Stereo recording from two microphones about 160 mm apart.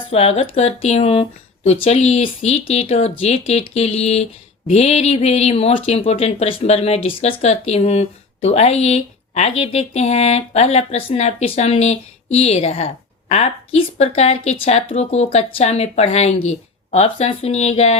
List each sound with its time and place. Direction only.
0.1 s speech: 40° left (ahead or behind)